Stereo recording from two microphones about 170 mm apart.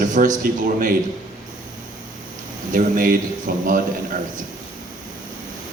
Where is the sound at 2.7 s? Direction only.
55° right (ahead or behind).